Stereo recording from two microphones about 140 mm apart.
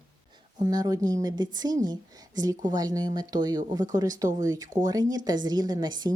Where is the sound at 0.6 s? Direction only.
25° right (ahead or behind).